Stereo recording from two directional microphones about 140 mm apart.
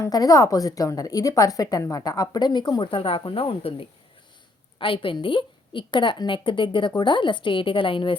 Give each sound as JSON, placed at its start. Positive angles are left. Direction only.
{"t": 0.0, "sound": "a woman's voice", "side_deg": 25}